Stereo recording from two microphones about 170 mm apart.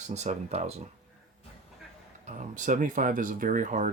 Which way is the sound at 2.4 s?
50° right (ahead or behind).